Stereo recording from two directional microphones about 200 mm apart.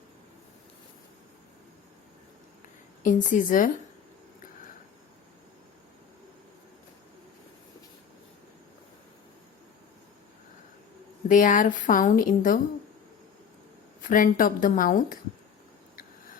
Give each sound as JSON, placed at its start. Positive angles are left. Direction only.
{"t": 3.0, "sound": "speech", "side_deg": 40}
{"t": 11.3, "sound": "speech", "side_deg": 40}
{"t": 14.0, "sound": "speech", "side_deg": 40}